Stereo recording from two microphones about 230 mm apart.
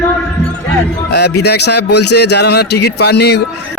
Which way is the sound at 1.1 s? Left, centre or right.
Left.